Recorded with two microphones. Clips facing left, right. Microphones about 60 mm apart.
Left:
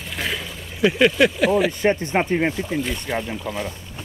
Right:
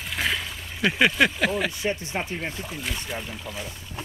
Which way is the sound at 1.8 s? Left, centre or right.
Left.